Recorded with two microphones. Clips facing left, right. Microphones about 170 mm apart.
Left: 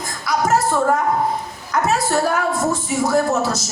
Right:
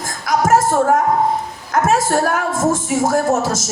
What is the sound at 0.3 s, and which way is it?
Music, 50° right (ahead or behind).